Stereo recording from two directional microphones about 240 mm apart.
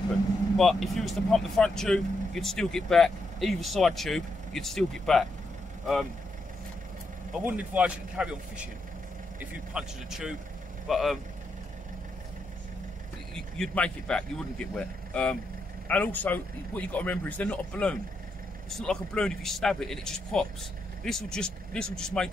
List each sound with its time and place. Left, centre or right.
0.6 s speech: centre
7.3 s speech: centre
9.4 s speech: centre
13.3 s speech: centre